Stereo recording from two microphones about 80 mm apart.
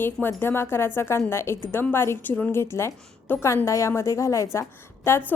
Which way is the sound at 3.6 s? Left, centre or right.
Left.